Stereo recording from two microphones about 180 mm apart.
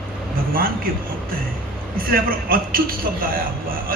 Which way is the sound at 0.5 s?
55° right (ahead or behind).